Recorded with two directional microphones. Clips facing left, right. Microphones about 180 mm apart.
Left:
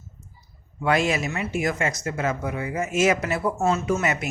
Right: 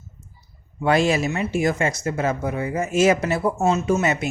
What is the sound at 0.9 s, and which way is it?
Speech, 30° right (ahead or behind).